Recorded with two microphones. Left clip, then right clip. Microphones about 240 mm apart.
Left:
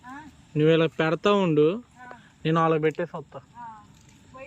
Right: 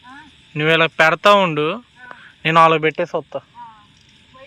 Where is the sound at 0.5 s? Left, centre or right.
Right.